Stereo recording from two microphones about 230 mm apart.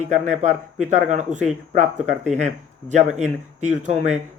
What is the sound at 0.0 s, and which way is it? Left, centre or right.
Speech, right.